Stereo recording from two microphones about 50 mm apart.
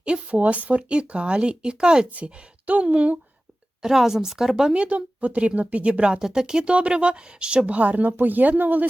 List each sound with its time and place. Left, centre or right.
0.0 s speech: right
2.1 s speech: right
3.8 s speech: centre; by 8.9 s right